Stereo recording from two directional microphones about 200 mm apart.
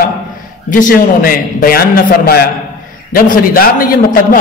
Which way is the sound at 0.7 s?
40° left (ahead or behind).